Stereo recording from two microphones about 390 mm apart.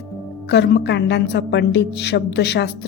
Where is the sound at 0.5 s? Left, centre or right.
Left.